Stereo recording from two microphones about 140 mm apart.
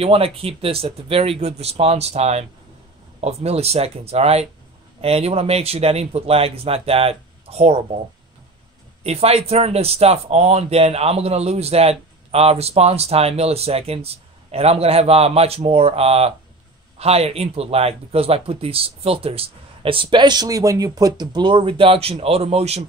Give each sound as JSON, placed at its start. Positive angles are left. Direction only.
{"t": 0.0, "sound": "speech", "side_deg": -40}
{"t": 9.0, "sound": "speech", "side_deg": -45}